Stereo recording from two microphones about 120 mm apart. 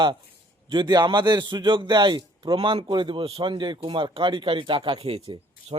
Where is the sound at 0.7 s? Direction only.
35° right (ahead or behind).